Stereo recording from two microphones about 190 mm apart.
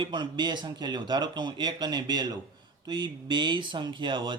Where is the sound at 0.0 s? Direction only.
25° right (ahead or behind).